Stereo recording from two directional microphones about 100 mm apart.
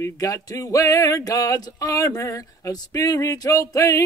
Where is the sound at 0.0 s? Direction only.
35° left (ahead or behind).